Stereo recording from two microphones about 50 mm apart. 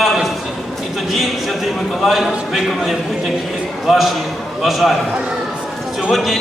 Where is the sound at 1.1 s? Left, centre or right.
Centre.